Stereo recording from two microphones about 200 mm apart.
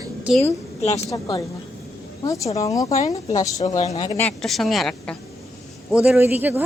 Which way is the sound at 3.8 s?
30° left (ahead or behind).